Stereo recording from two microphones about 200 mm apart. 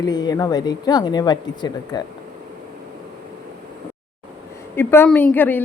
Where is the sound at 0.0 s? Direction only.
20° left (ahead or behind).